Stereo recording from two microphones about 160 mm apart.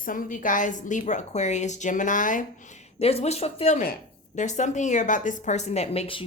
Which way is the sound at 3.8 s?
55° left (ahead or behind).